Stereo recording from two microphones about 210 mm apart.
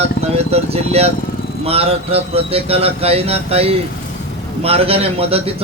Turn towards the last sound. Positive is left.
turn(degrees=-30)  # may be behind; listen again after turning